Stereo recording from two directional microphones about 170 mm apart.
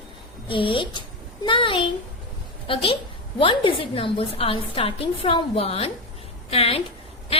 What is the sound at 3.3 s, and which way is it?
A woman's voice, 30° left (ahead or behind).